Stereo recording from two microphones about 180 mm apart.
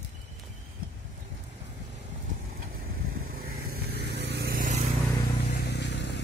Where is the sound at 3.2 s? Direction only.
55° right (ahead or behind).